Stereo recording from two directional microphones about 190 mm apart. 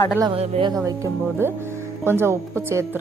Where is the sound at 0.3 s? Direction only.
30° right (ahead or behind).